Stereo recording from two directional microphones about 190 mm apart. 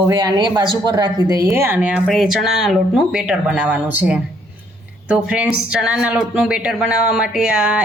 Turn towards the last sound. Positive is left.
turn(degrees=-5)  # may be behind; listen again after turning